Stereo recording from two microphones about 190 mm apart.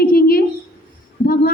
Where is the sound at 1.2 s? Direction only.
50° left (ahead or behind).